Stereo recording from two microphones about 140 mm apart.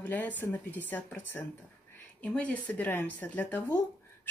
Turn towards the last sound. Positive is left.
turn(degrees=15)  # may be behind; listen again after turning